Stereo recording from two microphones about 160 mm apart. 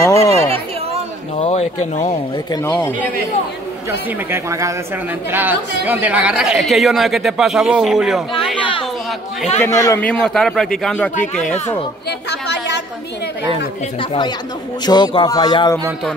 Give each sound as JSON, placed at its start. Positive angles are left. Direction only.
{"t": 0.0, "sound": "a sound", "side_deg": 20}
{"t": 1.4, "sound": "a sound", "side_deg": 40}
{"t": 2.0, "sound": "speech", "side_deg": 20}
{"t": 4.3, "sound": "a woman's voice", "side_deg": -20}
{"t": 9.6, "sound": "speech", "side_deg": 20}
{"t": 10.0, "sound": "a man's voice", "side_deg": 5}
{"t": 11.4, "sound": "speech", "side_deg": 45}
{"t": 12.3, "sound": "a woman's voice", "side_deg": 90}
{"t": 14.9, "sound": "speech", "side_deg": 25}